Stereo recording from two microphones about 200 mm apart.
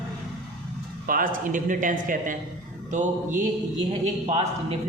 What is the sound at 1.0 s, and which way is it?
A man's voice, 45° right (ahead or behind).